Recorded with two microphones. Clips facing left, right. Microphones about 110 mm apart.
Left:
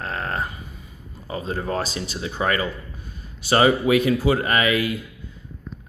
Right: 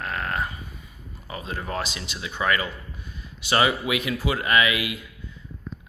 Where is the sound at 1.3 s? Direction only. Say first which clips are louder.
Left 5 dB; 35° left (ahead or behind).